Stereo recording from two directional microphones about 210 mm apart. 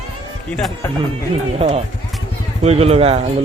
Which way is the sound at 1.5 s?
30° right (ahead or behind).